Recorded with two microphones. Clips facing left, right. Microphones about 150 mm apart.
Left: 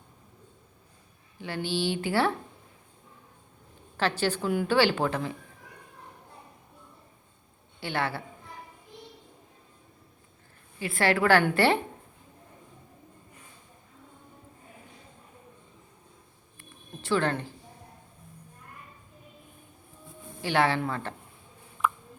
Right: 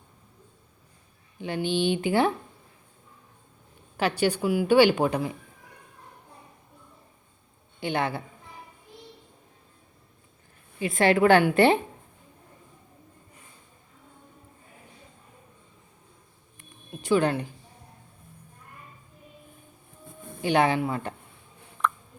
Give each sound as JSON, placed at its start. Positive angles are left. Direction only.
{"t": 1.4, "sound": "a woman's voice", "side_deg": -20}
{"t": 3.9, "sound": "a woman's voice", "side_deg": -15}
{"t": 7.8, "sound": "a man's voice", "side_deg": -20}
{"t": 10.8, "sound": "a woman's voice", "side_deg": -20}
{"t": 16.6, "sound": "a sound", "side_deg": -15}
{"t": 20.4, "sound": "a woman's voice", "side_deg": -20}